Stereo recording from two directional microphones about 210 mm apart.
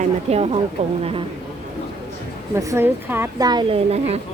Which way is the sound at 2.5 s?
10° right (ahead or behind).